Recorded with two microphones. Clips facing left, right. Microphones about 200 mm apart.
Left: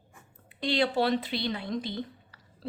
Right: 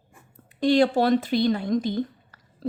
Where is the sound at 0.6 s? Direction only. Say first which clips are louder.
Right 7 dB; 45° right (ahead or behind).